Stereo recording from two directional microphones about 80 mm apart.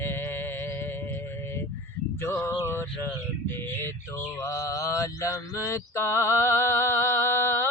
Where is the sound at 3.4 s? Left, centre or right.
Left.